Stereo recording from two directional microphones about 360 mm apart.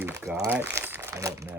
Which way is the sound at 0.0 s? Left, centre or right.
Centre.